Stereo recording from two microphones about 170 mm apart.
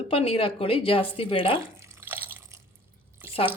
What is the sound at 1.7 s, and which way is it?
Drip, 15° right (ahead or behind).